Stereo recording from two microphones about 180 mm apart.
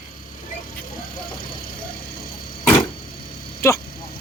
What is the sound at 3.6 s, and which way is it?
Speech, 15° left (ahead or behind).